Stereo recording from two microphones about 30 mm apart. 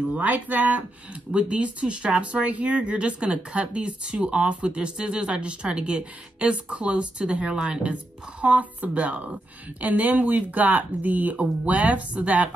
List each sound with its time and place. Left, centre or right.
0.1 s speech: right
1.3 s speech: right
2.4 s speech: right
7.9 s speech: right
11.6 s speech: right